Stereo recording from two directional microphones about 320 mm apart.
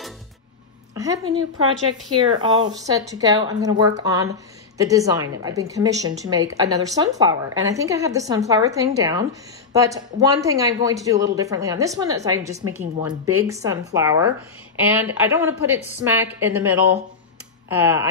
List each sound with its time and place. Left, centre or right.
0.9 s a woman's voice: centre
2.3 s a woman's voice: centre
13.2 s speech: right
13.5 s a woman's voice: centre